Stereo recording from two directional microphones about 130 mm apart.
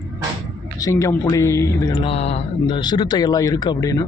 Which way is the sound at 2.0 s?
50° left (ahead or behind).